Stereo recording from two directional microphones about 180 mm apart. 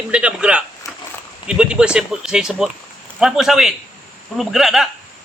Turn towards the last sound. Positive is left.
turn(degrees=0)  # may be behind; listen again after turning